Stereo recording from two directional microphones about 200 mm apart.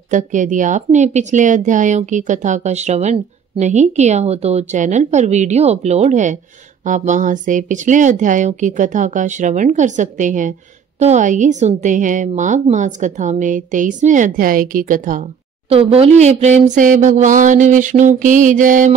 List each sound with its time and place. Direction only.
0.1 s speech: 40° right (ahead or behind)
15.7 s speech: 30° right (ahead or behind)